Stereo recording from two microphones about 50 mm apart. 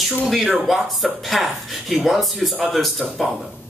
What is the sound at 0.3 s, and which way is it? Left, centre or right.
Speech, centre.